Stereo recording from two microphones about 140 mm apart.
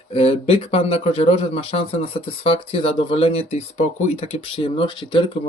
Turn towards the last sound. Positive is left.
turn(degrees=35)  # may be behind; listen again after turning